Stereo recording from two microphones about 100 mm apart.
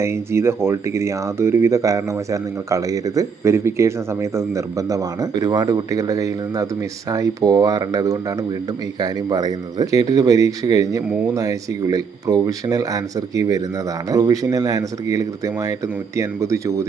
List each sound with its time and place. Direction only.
0.0 s speech: 25° right (ahead or behind)